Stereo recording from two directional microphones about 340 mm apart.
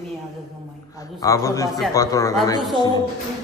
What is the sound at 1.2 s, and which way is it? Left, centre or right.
A man's voice, centre.